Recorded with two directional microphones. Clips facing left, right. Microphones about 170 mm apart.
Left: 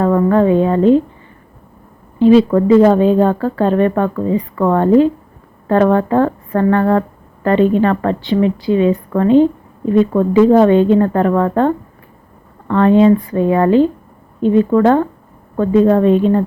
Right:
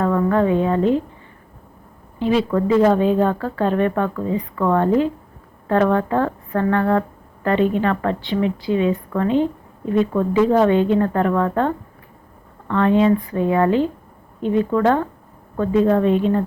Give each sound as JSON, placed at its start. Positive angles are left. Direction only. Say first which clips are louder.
{"t": 0.0, "sound": "a woman's voice", "louder": "left 5 dB", "side_deg": 35}
{"t": 2.1, "sound": "a woman's voice", "louder": "left 9 dB", "side_deg": 35}